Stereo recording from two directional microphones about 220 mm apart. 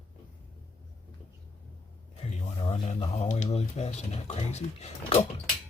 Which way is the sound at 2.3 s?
30° left (ahead or behind).